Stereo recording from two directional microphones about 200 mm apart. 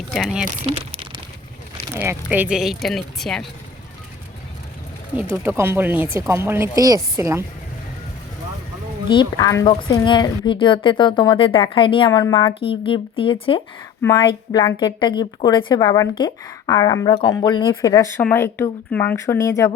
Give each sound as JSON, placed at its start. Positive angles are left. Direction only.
{"t": 0.1, "sound": "speech", "side_deg": 0}
{"t": 0.7, "sound": "crumpling", "side_deg": -25}
{"t": 2.0, "sound": "speech", "side_deg": -10}
{"t": 5.4, "sound": "speech", "side_deg": -10}
{"t": 9.0, "sound": "speech", "side_deg": 20}